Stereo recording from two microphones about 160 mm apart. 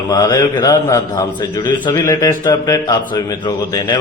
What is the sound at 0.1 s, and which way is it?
A man's voice, 25° left (ahead or behind).